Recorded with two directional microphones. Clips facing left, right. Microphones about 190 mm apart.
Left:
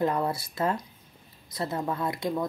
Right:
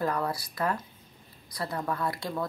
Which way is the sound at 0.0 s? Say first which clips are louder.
Left 3 dB; 25° left (ahead or behind).